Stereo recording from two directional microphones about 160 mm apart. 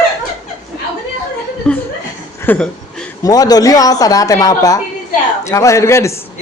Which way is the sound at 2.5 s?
10° left (ahead or behind).